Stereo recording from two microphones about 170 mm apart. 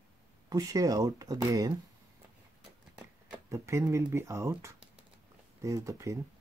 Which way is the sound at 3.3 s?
15° right (ahead or behind).